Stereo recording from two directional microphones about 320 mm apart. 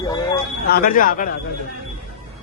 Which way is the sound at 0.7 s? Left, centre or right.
Left.